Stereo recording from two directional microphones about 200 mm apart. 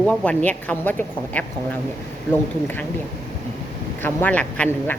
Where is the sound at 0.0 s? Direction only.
5° left (ahead or behind).